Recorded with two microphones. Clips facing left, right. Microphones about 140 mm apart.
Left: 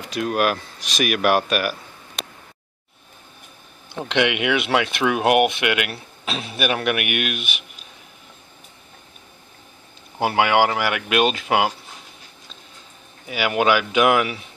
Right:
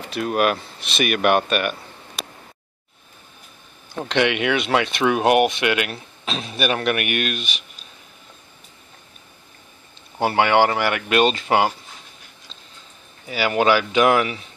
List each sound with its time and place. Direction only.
0.0 s speech: centre (ahead or behind)
4.1 s speech: 10° left (ahead or behind)
7.4 s speech: 55° left (ahead or behind)
10.1 s speech: 5° left (ahead or behind)
13.3 s speech: 10° left (ahead or behind)